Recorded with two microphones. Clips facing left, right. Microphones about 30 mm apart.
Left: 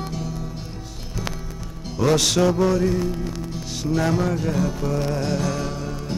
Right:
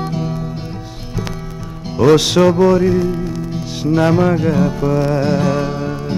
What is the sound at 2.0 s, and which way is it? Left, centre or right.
Music, right.